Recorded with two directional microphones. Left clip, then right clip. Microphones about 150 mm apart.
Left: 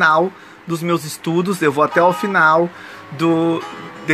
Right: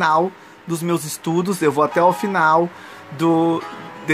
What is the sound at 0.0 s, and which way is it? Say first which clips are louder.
Speech: left 3 dB; 15° right (ahead or behind).